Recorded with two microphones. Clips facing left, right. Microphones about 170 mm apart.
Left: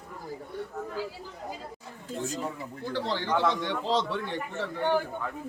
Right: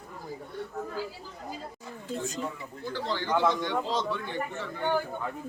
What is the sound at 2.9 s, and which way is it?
Speech, 70° left (ahead or behind).